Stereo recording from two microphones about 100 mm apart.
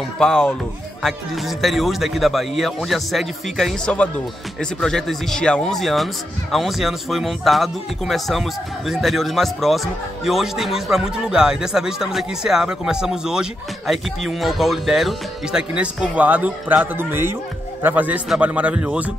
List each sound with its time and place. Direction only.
0.2 s speech: 5° left (ahead or behind); by 19.1 s 15° right (ahead or behind)